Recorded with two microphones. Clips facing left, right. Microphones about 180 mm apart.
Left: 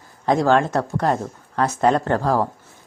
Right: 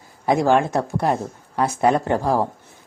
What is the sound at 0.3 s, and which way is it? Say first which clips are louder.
Speech: even; 15° right (ahead or behind).